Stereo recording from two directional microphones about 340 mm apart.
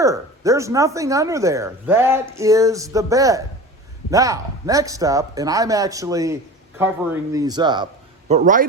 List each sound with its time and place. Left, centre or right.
0.0 s a man's voice: centre